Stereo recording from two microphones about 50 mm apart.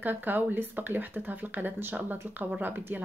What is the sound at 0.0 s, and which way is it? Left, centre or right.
Speech, right.